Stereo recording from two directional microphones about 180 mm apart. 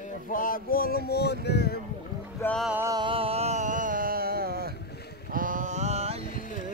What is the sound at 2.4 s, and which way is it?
Music, 5° left (ahead or behind).